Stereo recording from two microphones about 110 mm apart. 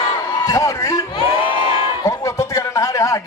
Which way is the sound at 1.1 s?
50° left (ahead or behind).